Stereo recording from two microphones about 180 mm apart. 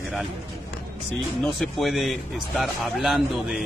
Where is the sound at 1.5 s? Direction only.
Centre (ahead or behind).